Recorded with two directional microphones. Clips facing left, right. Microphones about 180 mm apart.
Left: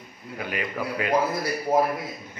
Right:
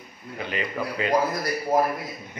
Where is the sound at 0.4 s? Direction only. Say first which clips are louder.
Right 1 dB; 5° left (ahead or behind).